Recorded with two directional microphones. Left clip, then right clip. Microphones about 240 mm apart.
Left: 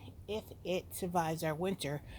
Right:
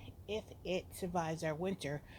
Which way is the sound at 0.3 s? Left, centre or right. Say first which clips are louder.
Left 2 dB; left.